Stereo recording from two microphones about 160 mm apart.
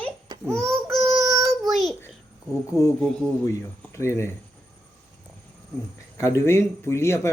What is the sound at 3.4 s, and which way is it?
Speech, 20° left (ahead or behind).